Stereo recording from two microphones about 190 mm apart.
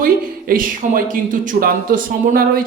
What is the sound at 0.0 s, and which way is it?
Speech, 45° right (ahead or behind).